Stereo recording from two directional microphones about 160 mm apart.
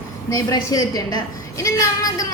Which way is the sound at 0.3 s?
25° left (ahead or behind).